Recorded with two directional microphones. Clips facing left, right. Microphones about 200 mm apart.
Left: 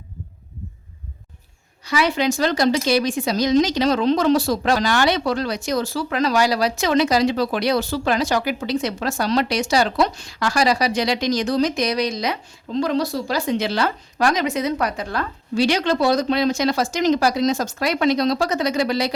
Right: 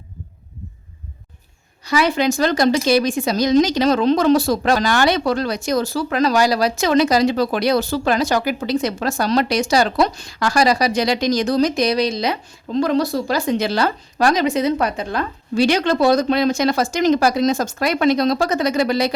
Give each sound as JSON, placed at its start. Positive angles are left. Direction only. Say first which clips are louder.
{"t": 1.8, "sound": "a woman's voice", "louder": "right 2 dB", "side_deg": -45}
{"t": 12.8, "sound": "speech", "louder": "right 3 dB", "side_deg": -50}
{"t": 15.5, "sound": "a woman's voice", "louder": "right 2 dB", "side_deg": -50}